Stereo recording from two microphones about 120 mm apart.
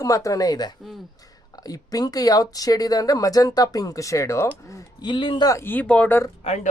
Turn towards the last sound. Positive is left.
turn(degrees=55)  # may be behind; listen again after turning